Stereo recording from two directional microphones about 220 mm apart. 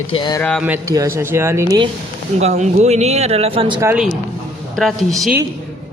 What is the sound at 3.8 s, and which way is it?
Speech, 5° right (ahead or behind).